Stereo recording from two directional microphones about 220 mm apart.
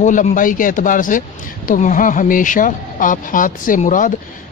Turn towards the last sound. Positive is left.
turn(degrees=35)  # may be behind; listen again after turning